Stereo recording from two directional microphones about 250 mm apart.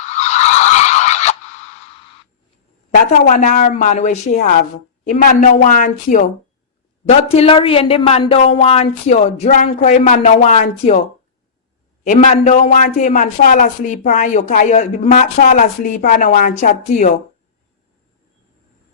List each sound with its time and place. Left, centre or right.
0.0 s skidding: left
3.1 s a man's voice: left
12.0 s a man's voice: left